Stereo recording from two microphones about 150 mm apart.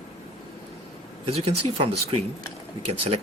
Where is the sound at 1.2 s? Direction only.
40° right (ahead or behind).